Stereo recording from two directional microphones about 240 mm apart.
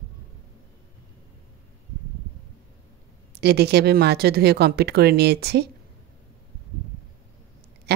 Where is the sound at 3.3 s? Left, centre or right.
Right.